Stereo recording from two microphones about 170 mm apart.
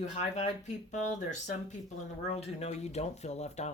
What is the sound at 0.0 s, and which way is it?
Speech, 45° left (ahead or behind).